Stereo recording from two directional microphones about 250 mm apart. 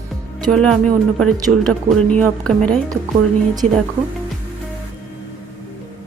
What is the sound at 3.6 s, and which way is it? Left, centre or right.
Speech, right.